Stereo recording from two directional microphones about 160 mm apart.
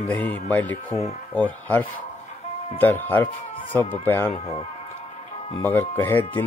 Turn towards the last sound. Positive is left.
turn(degrees=10)  # may be behind; listen again after turning